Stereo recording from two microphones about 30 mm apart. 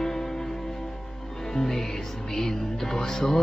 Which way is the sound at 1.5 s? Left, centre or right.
Centre.